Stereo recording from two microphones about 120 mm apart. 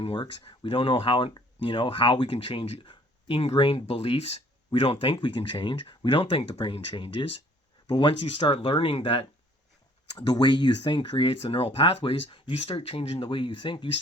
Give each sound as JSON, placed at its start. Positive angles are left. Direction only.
{"t": 0.0, "sound": "speech", "side_deg": 45}
{"t": 10.2, "sound": "speech", "side_deg": 35}